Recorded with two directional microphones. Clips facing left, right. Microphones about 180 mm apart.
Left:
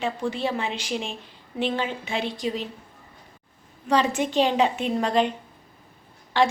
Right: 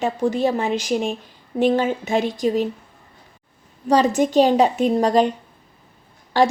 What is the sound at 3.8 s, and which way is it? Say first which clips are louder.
A woman's voice: right 6 dB; 40° right (ahead or behind).